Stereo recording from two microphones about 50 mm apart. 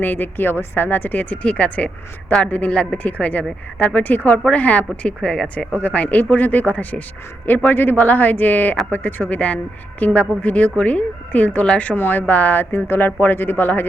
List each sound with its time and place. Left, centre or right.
0.0 s speech: left
5.0 s a woman's voice: centre
5.8 s speech: left
7.7 s speech: left